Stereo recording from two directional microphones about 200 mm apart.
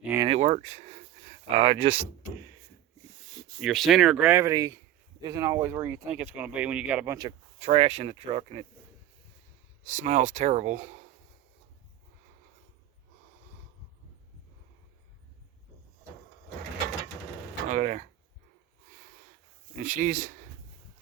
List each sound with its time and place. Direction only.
0.0 s a sound: 10° right (ahead or behind)
0.3 s speech: 35° right (ahead or behind)
3.6 s speech: centre (ahead or behind); by 7.3 s 15° right (ahead or behind)
7.6 s speech: 30° right (ahead or behind)
9.8 s speech: 35° right (ahead or behind)
17.7 s speech: 35° right (ahead or behind)
19.8 s speech: 40° right (ahead or behind)